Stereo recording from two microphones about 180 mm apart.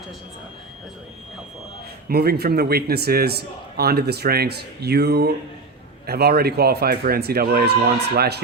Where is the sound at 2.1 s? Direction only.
60° right (ahead or behind).